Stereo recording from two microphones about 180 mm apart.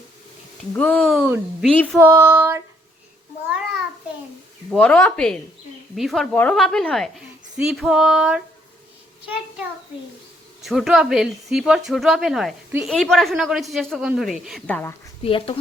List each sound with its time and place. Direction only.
0.7 s speech: 10° left (ahead or behind)
2.0 s child singing: 15° right (ahead or behind)
4.7 s speech: 5° left (ahead or behind)
10.6 s speech: centre (ahead or behind)
15.2 s speech: 30° left (ahead or behind)